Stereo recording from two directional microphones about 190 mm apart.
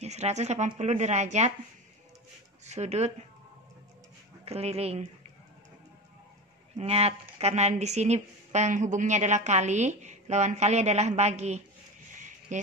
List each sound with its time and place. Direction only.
0.0 s a woman's voice: 35° right (ahead or behind)
2.6 s speech: 35° right (ahead or behind)
4.5 s a woman's voice: 35° right (ahead or behind)
6.8 s a woman's voice: 35° right (ahead or behind)